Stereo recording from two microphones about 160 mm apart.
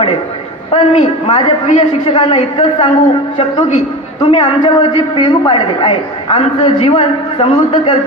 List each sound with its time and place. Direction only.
0.7 s a man's voice: 35° left (ahead or behind)